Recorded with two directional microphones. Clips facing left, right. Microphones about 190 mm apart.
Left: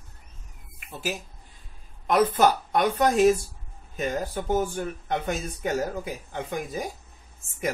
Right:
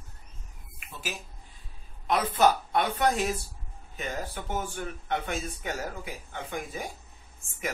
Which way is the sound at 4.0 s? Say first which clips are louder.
Left 7 dB; 40° left (ahead or behind).